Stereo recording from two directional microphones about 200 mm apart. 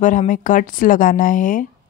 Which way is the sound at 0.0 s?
40° left (ahead or behind).